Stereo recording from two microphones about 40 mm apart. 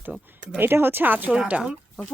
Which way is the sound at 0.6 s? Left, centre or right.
Right.